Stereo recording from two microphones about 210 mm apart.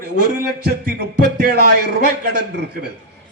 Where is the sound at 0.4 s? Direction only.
50° right (ahead or behind).